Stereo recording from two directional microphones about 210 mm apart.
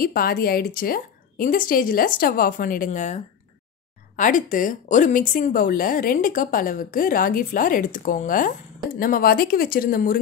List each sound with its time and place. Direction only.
0.0 s a woman's voice: 45° left (ahead or behind)
4.2 s speech: 40° left (ahead or behind)